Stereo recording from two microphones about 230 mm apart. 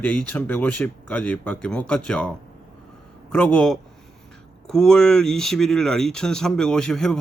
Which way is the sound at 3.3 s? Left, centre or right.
Centre.